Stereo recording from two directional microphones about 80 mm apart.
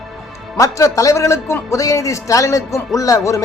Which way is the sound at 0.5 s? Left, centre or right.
Left.